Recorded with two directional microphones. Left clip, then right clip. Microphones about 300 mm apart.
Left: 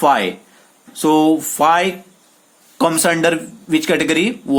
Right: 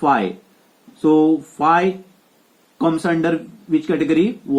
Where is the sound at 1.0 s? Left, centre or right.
Left.